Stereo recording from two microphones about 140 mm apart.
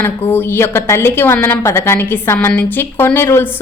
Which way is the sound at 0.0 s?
15° left (ahead or behind).